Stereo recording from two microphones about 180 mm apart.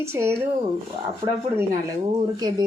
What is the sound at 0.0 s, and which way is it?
Speech, 15° right (ahead or behind).